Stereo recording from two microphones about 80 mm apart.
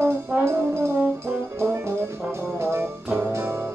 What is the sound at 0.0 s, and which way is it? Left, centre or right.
Brass instrument, right.